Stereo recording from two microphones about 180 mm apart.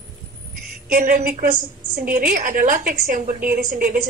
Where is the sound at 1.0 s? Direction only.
45° right (ahead or behind).